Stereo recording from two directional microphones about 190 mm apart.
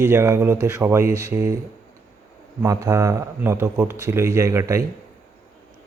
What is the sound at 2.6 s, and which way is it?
A man's voice, 15° right (ahead or behind).